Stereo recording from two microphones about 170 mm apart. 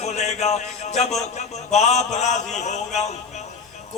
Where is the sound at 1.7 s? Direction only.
40° left (ahead or behind).